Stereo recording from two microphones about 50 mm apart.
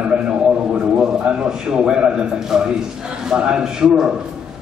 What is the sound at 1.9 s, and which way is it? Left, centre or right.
A man's voice, centre.